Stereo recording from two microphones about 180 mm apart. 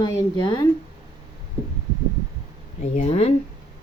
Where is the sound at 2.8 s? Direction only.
40° left (ahead or behind).